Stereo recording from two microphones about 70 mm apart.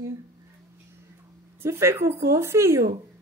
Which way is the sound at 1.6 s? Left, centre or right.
Right.